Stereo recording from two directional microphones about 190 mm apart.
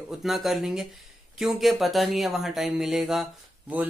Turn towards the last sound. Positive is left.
turn(degrees=-5)  # may be behind; listen again after turning